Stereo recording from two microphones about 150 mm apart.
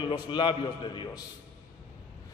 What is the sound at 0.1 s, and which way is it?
A man's voice, 30° left (ahead or behind).